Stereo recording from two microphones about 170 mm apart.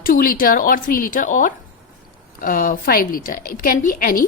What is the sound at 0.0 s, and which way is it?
A woman's voice, 55° left (ahead or behind).